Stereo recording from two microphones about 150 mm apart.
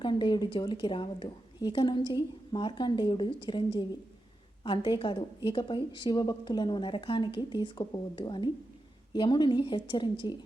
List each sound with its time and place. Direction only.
0.0 s a woman's voice: 30° left (ahead or behind)